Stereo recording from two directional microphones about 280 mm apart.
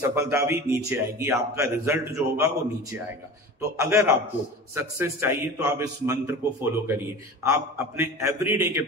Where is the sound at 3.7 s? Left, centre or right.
Centre.